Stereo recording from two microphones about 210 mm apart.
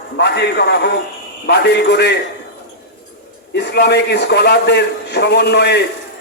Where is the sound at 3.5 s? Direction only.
50° left (ahead or behind).